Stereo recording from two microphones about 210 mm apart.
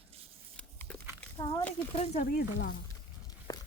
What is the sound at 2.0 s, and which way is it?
Speech, 35° left (ahead or behind).